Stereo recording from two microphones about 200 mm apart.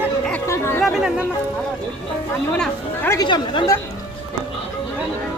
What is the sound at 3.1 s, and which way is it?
Speech, 25° left (ahead or behind).